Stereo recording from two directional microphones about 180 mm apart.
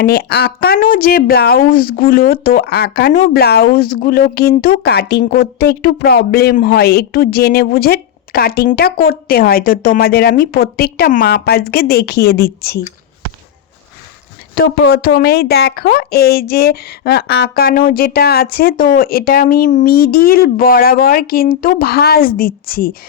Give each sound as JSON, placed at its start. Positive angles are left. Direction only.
{"t": 0.0, "sound": "speech", "side_deg": 60}
{"t": 14.5, "sound": "speech", "side_deg": 60}